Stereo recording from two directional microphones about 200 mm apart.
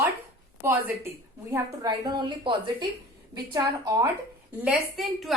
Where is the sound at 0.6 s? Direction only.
10° right (ahead or behind).